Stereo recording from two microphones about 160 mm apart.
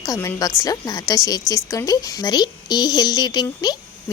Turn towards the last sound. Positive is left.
turn(degrees=25)  # may be behind; listen again after turning